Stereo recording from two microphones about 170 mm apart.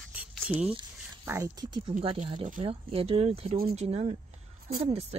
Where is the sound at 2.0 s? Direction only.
30° right (ahead or behind).